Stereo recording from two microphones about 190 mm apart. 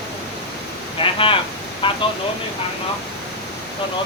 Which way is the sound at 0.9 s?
30° left (ahead or behind).